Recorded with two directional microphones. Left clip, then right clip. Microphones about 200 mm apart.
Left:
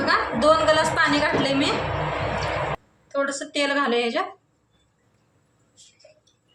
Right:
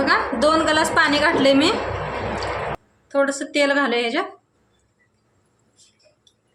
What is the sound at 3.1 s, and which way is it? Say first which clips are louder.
Speech: right 5 dB; 50° right (ahead or behind).